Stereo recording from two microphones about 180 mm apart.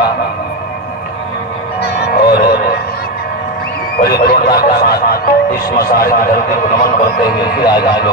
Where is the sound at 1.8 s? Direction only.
60° left (ahead or behind).